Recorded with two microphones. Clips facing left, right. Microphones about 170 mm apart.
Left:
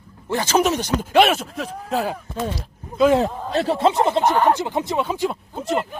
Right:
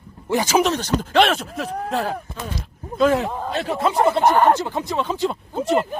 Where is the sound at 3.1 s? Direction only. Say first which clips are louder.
Left 3 dB; 35° left (ahead or behind).